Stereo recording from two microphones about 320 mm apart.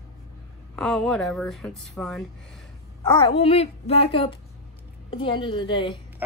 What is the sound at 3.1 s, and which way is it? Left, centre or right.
Speech, centre.